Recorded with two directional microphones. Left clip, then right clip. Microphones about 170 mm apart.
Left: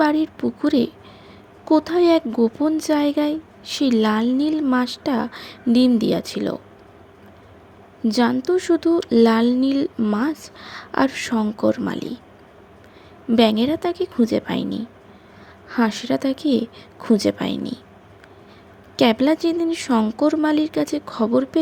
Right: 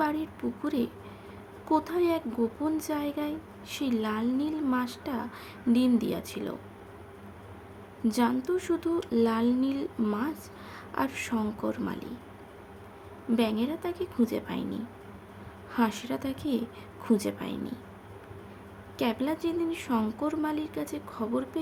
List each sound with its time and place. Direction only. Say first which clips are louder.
0.0 s a woman's voice: left 11 dB; 35° left (ahead or behind)
8.0 s a woman's voice: left 9 dB; 30° left (ahead or behind)
13.3 s a woman's voice: left 12 dB; 40° left (ahead or behind)
18.9 s a woman's voice: left 13 dB; 35° left (ahead or behind)